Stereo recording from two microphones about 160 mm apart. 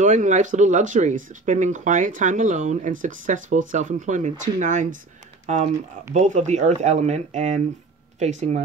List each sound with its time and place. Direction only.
0.0 s speech: 50° right (ahead or behind)